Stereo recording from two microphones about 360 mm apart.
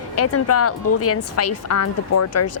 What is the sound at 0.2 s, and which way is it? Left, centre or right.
Speech, left.